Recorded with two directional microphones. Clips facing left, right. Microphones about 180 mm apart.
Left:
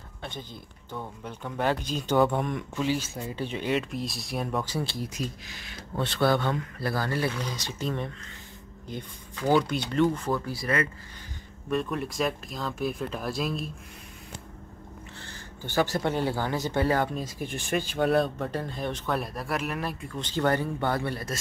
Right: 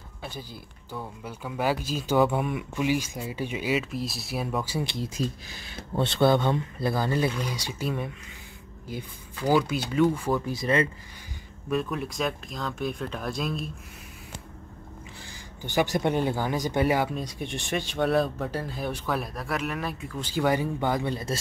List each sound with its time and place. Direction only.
0.2 s speech: 5° right (ahead or behind)
5.0 s speech: 30° right (ahead or behind)
11.7 s speech: centre (ahead or behind)
15.1 s speech: 10° right (ahead or behind)
17.1 s speech: centre (ahead or behind); by 21.4 s 20° right (ahead or behind)